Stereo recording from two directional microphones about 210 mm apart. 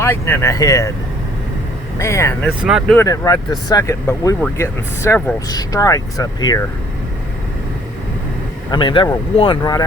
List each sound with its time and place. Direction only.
0.0 s speech: 10° left (ahead or behind)
2.0 s speech: 15° left (ahead or behind)
2.6 s speech: centre (ahead or behind)
3.1 s speech: 20° left (ahead or behind)
8.7 s speech: 25° left (ahead or behind)